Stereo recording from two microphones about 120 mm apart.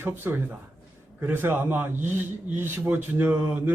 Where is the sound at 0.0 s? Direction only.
20° right (ahead or behind).